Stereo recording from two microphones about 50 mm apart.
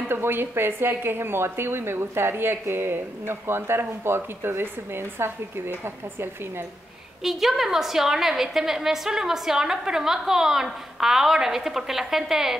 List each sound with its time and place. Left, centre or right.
0.1 s speech: right
7.2 s a woman's voice: centre